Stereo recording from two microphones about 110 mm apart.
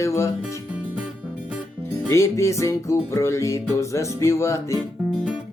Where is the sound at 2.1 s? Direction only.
25° left (ahead or behind).